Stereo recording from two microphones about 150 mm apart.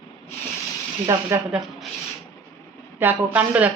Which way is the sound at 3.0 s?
10° right (ahead or behind).